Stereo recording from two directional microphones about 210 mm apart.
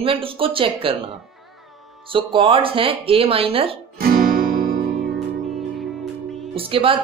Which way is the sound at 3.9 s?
45° right (ahead or behind).